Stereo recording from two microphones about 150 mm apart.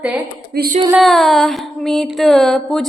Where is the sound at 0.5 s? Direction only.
90° right.